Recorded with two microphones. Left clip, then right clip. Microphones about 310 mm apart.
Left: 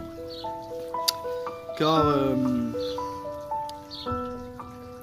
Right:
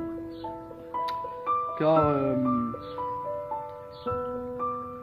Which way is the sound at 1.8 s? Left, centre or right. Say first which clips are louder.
Left 2 dB; centre.